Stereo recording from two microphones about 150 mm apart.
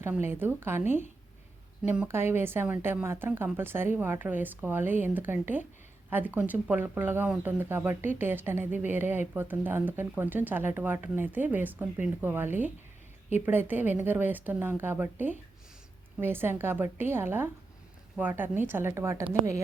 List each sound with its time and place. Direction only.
0.0 s speech: 15° right (ahead or behind)
2.0 s speech: 15° right (ahead or behind)